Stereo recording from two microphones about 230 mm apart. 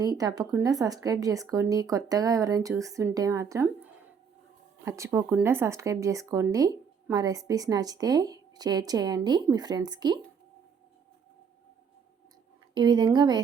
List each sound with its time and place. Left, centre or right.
0.0 s speech: centre
12.7 s a woman's voice: centre